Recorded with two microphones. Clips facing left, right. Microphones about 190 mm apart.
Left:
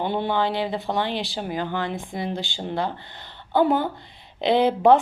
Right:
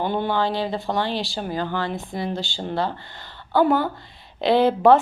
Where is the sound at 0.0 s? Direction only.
20° left (ahead or behind).